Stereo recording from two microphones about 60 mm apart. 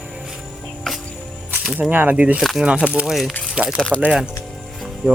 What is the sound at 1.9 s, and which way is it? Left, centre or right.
Speech, right.